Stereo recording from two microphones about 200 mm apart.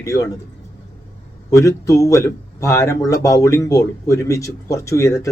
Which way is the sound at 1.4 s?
15° left (ahead or behind).